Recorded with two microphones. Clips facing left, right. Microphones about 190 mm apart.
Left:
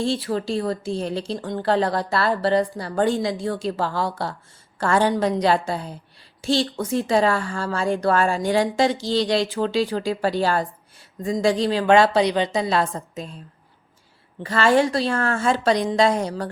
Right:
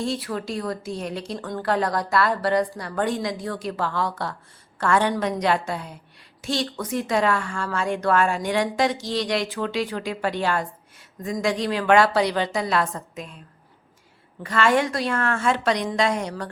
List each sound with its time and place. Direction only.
0.0 s a woman's voice: 30° left (ahead or behind)
14.4 s a woman's voice: 30° left (ahead or behind)